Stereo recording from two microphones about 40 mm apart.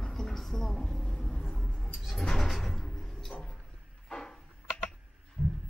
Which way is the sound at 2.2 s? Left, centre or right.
Centre.